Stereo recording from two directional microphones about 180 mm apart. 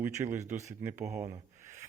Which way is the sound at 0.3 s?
40° right (ahead or behind).